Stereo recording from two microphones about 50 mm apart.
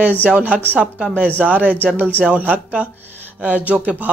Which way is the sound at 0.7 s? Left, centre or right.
Right.